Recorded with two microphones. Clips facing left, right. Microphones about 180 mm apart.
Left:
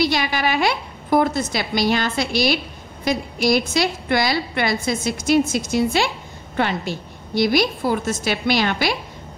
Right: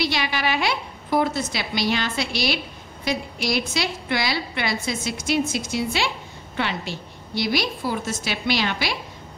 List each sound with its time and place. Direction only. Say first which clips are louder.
0.0 s a woman's voice: left 4 dB; 45° left (ahead or behind)